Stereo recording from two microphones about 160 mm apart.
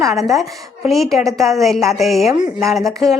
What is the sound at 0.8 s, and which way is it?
A woman's voice, centre (ahead or behind).